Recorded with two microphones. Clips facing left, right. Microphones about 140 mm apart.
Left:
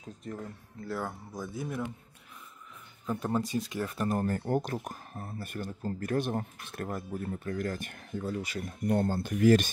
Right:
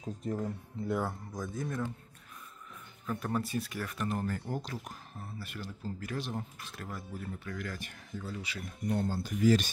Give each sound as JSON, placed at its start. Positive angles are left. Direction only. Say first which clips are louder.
{"t": 0.3, "sound": "speech", "louder": "right 5 dB", "side_deg": -20}
{"t": 1.0, "sound": "speech", "louder": "even", "side_deg": 5}
{"t": 3.1, "sound": "speech", "louder": "left 3 dB", "side_deg": 20}